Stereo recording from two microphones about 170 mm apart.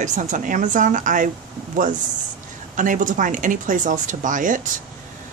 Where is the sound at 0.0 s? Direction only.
45° right (ahead or behind).